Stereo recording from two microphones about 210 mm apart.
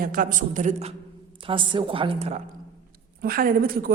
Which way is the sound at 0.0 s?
40° right (ahead or behind).